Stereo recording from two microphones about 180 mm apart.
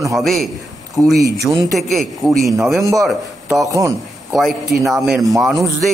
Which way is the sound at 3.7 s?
15° right (ahead or behind).